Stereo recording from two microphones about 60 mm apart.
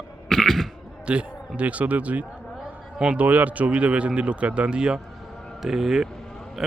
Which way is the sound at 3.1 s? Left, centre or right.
Right.